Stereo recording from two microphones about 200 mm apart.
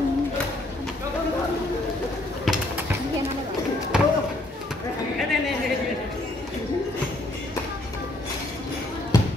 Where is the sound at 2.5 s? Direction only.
Centre (ahead or behind).